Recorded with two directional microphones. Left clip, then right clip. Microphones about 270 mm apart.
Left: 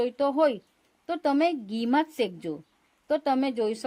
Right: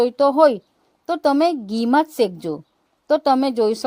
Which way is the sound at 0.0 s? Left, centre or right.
Right.